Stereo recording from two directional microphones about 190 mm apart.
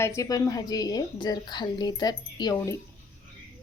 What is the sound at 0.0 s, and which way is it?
A woman's voice, 20° left (ahead or behind).